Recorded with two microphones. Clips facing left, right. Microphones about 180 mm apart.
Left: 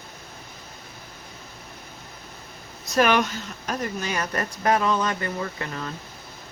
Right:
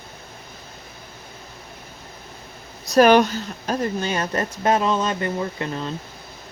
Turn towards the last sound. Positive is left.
turn(degrees=-25)  # may be behind; listen again after turning